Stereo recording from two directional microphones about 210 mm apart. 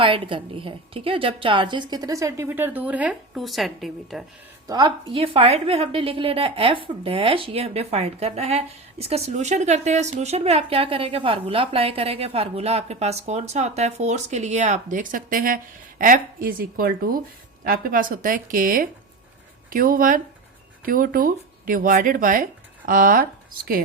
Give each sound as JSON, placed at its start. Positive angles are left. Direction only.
{"t": 0.0, "sound": "a woman's voice", "side_deg": -25}
{"t": 4.6, "sound": "a woman's voice", "side_deg": -20}